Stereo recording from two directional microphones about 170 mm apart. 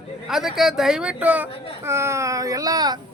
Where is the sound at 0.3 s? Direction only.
Centre (ahead or behind).